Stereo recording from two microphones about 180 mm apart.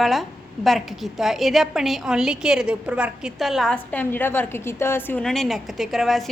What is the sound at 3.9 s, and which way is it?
A woman's voice, 10° left (ahead or behind).